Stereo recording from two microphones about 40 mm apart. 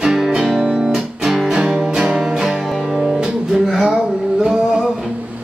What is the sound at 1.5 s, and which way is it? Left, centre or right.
Music, centre.